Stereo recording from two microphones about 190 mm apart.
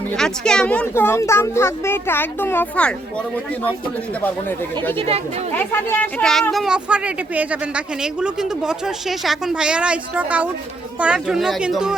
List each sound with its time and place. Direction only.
0.2 s speech: 5° left (ahead or behind)
4.2 s speech: 10° left (ahead or behind)
4.9 s speech: 30° right (ahead or behind)
5.5 s speech: 10° left (ahead or behind)